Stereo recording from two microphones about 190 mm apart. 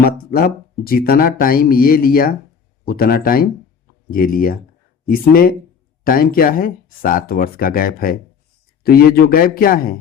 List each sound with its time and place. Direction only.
0.0 s speech: 50° left (ahead or behind)